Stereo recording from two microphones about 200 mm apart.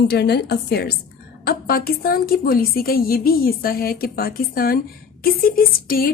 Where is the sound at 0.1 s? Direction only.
55° left (ahead or behind).